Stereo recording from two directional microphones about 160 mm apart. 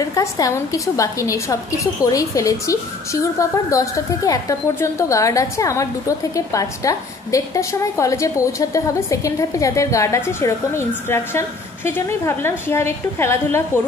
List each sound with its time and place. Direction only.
0.0 s a woman's voice: 20° left (ahead or behind)